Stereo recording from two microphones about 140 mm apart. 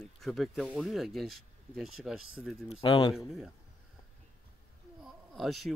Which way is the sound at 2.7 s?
35° left (ahead or behind).